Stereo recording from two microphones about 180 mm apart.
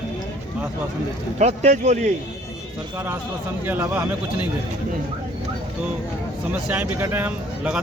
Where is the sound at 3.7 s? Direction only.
10° right (ahead or behind).